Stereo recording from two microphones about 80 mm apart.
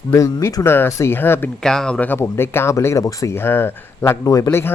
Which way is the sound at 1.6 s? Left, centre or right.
Centre.